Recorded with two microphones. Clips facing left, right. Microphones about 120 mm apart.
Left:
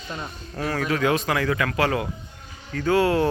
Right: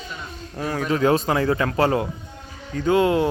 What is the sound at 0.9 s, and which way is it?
Speech, 30° right (ahead or behind).